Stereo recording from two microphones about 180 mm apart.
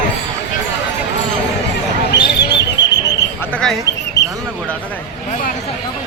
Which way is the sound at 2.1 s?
75° left (ahead or behind).